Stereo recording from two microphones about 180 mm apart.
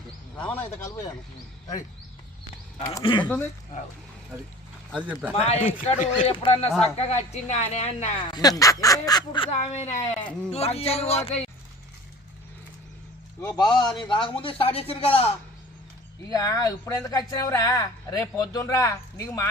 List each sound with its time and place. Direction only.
0.3 s speech: 10° left (ahead or behind)
3.0 s speech: 25° left (ahead or behind)
4.9 s speech: 5° right (ahead or behind)
5.3 s speech: 35° left (ahead or behind)
6.7 s speech: 5° left (ahead or behind)
7.0 s speech: 35° left (ahead or behind)
8.3 s speech: 20° left (ahead or behind)
9.7 s speech: 40° left (ahead or behind)
13.4 s speech: 25° left (ahead or behind)
16.3 s speech: 20° left (ahead or behind)